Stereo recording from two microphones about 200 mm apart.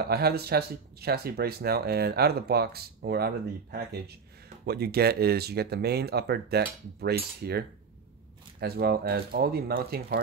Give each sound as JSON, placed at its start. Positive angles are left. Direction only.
{"t": 0.0, "sound": "speech", "side_deg": -50}